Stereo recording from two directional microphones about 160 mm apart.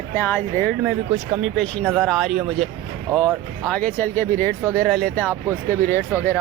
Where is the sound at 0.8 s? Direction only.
5° right (ahead or behind).